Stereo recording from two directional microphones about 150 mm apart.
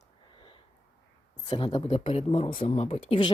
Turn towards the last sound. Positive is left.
turn(degrees=35)  # may be behind; listen again after turning